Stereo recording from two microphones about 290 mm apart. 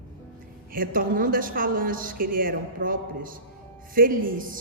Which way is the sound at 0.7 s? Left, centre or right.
Right.